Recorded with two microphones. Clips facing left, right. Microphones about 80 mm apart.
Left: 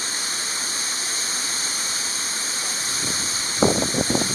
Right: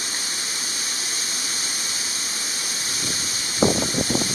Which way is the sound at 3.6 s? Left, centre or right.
Left.